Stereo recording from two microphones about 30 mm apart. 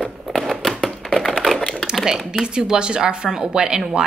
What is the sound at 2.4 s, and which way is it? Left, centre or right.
Speech, right.